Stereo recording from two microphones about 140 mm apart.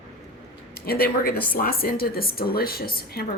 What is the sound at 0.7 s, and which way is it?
Speech, 90° left.